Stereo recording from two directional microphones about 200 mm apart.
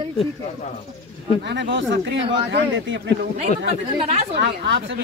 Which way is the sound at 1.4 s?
65° right (ahead or behind).